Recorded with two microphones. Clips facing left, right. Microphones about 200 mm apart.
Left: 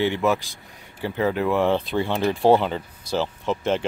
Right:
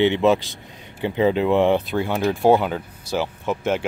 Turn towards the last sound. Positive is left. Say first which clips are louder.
# right 1 dB
turn(degrees=-10)  # may be behind; listen again after turning